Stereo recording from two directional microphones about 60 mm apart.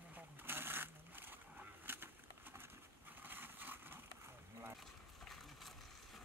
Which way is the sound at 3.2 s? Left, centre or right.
Right.